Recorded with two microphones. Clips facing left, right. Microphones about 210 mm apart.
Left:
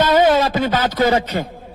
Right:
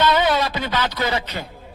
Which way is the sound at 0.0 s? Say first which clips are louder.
Left 5 dB; 45° left (ahead or behind).